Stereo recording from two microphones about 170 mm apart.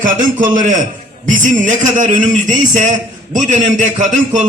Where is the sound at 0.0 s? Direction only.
50° right (ahead or behind).